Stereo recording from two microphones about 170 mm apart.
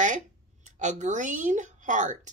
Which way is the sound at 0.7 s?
45° right (ahead or behind).